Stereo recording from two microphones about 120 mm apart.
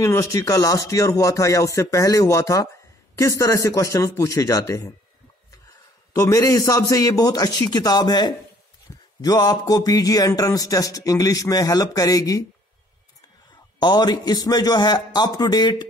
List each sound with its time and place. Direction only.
0.0 s speech: 25° left (ahead or behind)
6.1 s speech: 30° left (ahead or behind)
8.9 s a sound: 20° left (ahead or behind)
9.2 s speech: 30° left (ahead or behind)
13.7 s speech: 35° left (ahead or behind)